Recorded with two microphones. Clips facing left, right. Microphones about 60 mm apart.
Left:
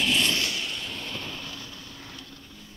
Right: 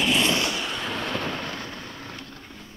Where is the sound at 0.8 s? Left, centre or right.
Right.